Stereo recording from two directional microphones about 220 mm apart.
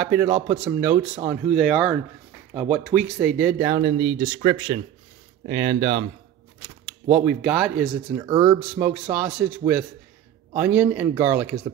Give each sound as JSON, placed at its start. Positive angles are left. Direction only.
{"t": 0.0, "sound": "speech", "side_deg": -5}
{"t": 7.1, "sound": "speech", "side_deg": -5}
{"t": 8.2, "sound": "speech", "side_deg": -20}
{"t": 8.5, "sound": "speech", "side_deg": -5}
{"t": 10.5, "sound": "a man's voice", "side_deg": -5}